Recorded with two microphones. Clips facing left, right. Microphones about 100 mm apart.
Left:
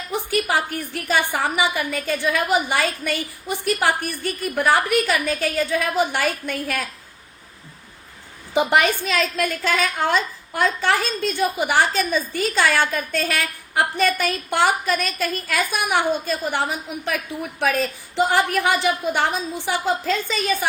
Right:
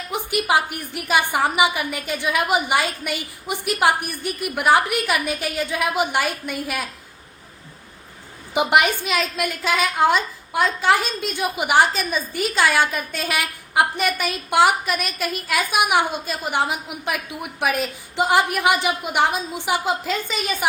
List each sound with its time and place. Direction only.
0.1 s a woman's voice: 15° right (ahead or behind)
8.5 s a woman's voice: 15° right (ahead or behind)
11.9 s a woman's voice: 5° right (ahead or behind)